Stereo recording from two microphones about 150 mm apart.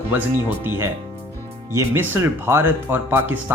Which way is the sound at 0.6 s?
15° right (ahead or behind).